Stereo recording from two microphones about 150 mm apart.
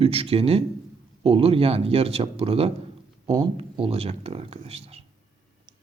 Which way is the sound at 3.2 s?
30° right (ahead or behind).